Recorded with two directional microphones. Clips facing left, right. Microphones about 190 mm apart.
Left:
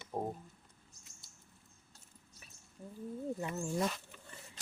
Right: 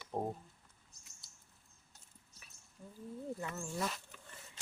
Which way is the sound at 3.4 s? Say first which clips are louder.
Left 4 dB; 15° left (ahead or behind).